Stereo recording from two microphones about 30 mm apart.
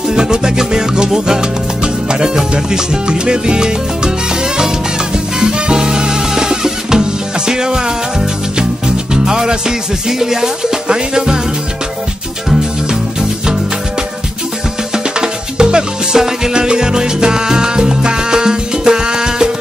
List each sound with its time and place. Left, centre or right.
0.1 s music: right
5.4 s music: right
15.1 s music: right
16.5 s salsa music: right